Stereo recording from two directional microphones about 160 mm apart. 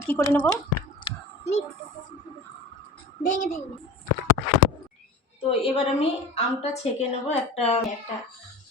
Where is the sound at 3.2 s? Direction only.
55° left (ahead or behind).